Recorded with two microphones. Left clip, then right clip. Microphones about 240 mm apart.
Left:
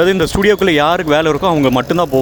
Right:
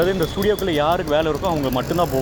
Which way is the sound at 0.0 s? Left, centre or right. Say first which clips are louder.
Left 7 dB; left.